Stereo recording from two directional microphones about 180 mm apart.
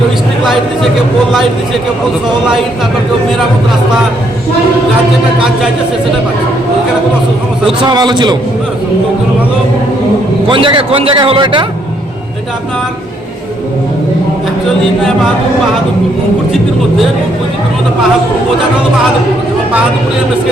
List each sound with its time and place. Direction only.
1.3 s speech: centre (ahead or behind)
7.9 s a man's voice: 25° right (ahead or behind)
10.5 s a man's voice: 30° right (ahead or behind)